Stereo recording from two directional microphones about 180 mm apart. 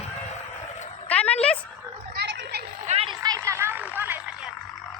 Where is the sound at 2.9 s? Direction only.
30° right (ahead or behind); by 4.5 s 10° right (ahead or behind).